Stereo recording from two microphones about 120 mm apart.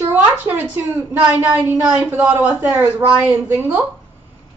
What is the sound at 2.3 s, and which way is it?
A woman's voice, 10° right (ahead or behind).